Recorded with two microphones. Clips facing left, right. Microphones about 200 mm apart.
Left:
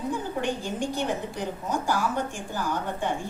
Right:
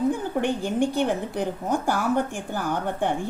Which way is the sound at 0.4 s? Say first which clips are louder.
Right 8 dB; 55° right (ahead or behind).